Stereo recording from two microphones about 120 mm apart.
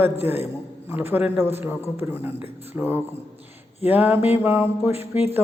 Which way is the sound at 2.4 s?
15° right (ahead or behind).